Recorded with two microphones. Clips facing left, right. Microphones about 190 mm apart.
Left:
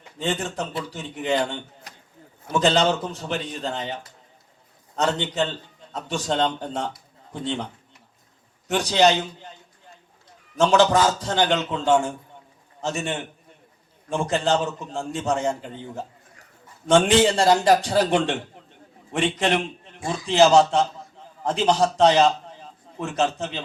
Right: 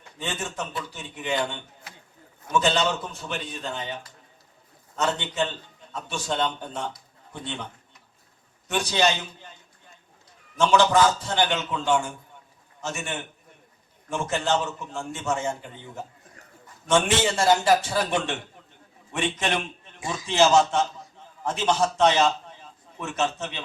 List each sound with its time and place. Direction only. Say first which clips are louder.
0.2 s a man's voice: left 5 dB; 35° left (ahead or behind)
4.9 s a man's voice: left 3 dB; 35° left (ahead or behind)
8.8 s a man's voice: left 5 dB; 35° left (ahead or behind)
10.6 s a man's voice: left 2 dB; 40° left (ahead or behind)